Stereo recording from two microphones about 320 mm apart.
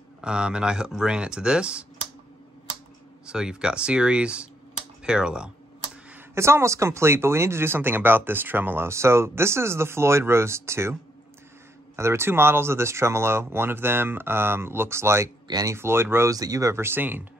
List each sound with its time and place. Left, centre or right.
0.2 s speech: centre
3.3 s speech: centre
12.0 s speech: centre